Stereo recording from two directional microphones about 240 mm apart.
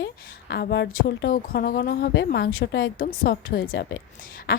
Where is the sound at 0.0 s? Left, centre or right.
Left.